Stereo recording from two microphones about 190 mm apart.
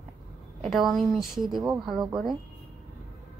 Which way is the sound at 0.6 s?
Centre (ahead or behind).